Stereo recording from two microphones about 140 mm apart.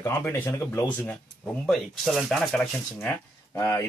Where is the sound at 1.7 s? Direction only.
Centre (ahead or behind).